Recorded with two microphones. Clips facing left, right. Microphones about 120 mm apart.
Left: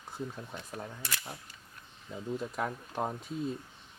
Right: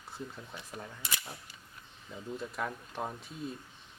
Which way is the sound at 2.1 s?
10° left (ahead or behind).